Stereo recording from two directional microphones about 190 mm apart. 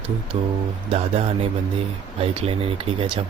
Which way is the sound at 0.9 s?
30° right (ahead or behind).